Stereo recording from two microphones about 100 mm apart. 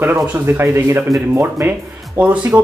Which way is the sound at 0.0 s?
20° right (ahead or behind).